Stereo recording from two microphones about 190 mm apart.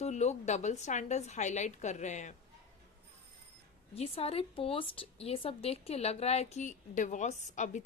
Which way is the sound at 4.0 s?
30° left (ahead or behind).